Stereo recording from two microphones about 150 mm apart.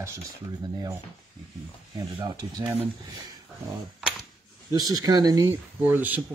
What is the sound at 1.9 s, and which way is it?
Speech, 30° right (ahead or behind).